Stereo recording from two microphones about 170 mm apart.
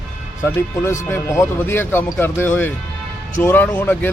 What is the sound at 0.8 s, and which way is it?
Speech, 15° left (ahead or behind).